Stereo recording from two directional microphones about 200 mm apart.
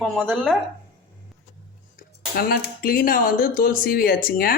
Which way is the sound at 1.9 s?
45° left (ahead or behind).